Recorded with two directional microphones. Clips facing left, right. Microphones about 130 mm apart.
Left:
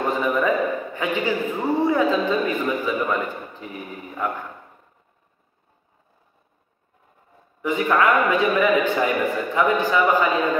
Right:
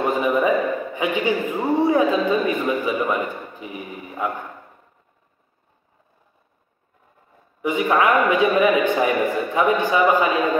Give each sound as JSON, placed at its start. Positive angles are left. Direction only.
{"t": 0.2, "sound": "a man's voice", "side_deg": -15}
{"t": 4.1, "sound": "a man's voice", "side_deg": -25}
{"t": 7.6, "sound": "a man's voice", "side_deg": -15}